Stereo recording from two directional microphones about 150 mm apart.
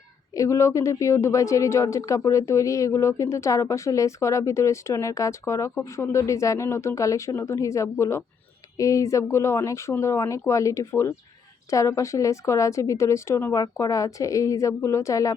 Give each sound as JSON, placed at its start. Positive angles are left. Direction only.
{"t": 0.3, "sound": "speech", "side_deg": 20}